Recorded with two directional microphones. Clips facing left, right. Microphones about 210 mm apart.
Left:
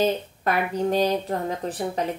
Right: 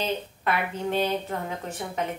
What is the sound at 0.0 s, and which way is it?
A woman's voice, 40° left (ahead or behind).